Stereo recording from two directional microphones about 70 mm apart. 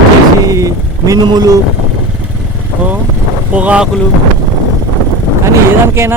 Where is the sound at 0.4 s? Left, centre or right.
Right.